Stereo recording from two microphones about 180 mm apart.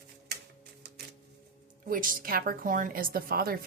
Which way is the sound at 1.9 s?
50° right (ahead or behind).